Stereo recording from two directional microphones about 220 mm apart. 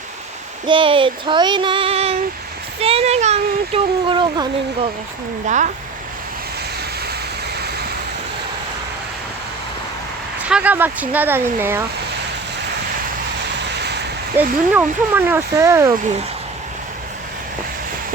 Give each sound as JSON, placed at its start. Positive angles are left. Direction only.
{"t": 0.7, "sound": "child singing", "side_deg": -25}
{"t": 5.5, "sound": "speech", "side_deg": -35}
{"t": 10.5, "sound": "speech", "side_deg": -5}
{"t": 14.3, "sound": "speech", "side_deg": -10}